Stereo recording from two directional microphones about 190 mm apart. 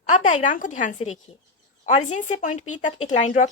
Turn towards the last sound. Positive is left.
turn(degrees=40)  # may be behind; listen again after turning